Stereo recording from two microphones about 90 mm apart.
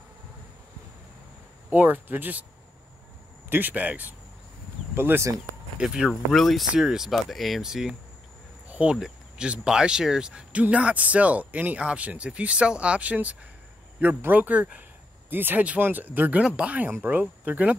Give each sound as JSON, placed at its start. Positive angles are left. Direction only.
{"t": 1.7, "sound": "speech", "side_deg": -20}
{"t": 3.4, "sound": "speech", "side_deg": -20}
{"t": 5.8, "sound": "speech", "side_deg": -10}
{"t": 6.3, "sound": "speech", "side_deg": 0}
{"t": 8.6, "sound": "insect", "side_deg": -15}
{"t": 8.9, "sound": "speech", "side_deg": -10}